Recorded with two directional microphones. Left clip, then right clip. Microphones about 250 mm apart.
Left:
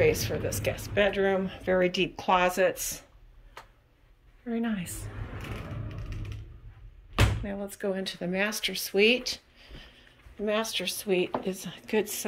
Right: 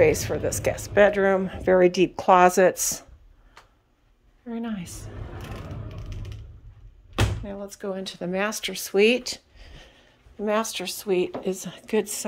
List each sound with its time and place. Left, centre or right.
0.0 s speech: centre
4.5 s a woman's voice: centre
5.9 s music: right
7.4 s speech: centre